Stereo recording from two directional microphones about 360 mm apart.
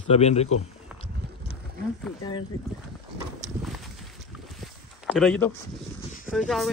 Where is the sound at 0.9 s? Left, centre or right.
Centre.